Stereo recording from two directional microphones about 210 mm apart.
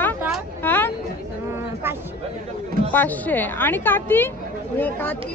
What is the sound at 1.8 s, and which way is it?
Speech, 10° right (ahead or behind).